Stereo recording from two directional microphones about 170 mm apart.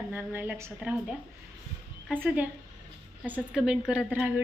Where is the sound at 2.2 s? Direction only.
10° right (ahead or behind).